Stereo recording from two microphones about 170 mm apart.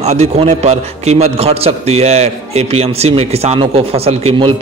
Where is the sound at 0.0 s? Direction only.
40° right (ahead or behind).